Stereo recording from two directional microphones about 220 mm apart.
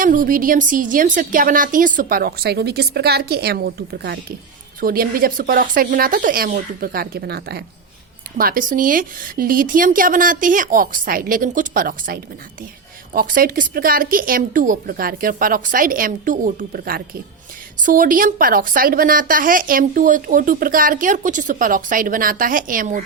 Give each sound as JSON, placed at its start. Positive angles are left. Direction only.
{"t": 0.0, "sound": "a woman's voice", "side_deg": -40}